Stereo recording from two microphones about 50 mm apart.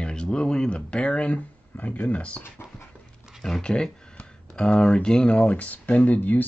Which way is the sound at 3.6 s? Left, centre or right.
Centre.